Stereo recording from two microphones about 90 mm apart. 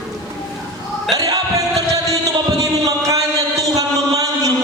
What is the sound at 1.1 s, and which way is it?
Music, 40° right (ahead or behind).